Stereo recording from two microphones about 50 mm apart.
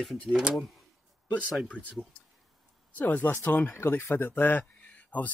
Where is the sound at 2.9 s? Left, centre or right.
Left.